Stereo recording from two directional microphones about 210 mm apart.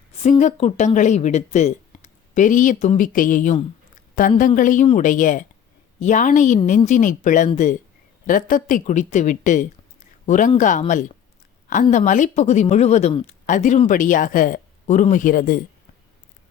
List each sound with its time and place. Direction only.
0.2 s speech: 35° left (ahead or behind)